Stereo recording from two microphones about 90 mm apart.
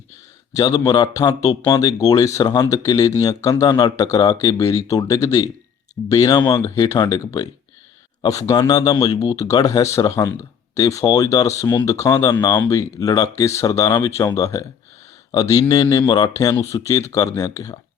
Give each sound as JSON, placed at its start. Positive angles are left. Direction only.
{"t": 0.5, "sound": "speech", "side_deg": 45}
{"t": 6.4, "sound": "speech", "side_deg": 35}
{"t": 8.3, "sound": "speech", "side_deg": 40}